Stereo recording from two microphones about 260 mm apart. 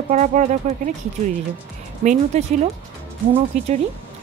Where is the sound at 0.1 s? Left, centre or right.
Right.